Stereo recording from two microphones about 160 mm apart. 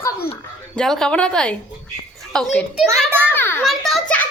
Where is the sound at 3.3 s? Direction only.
15° left (ahead or behind).